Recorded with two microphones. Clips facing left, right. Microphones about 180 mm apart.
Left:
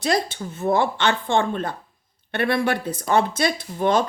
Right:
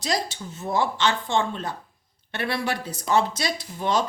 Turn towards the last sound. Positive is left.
turn(degrees=55)  # may be behind; listen again after turning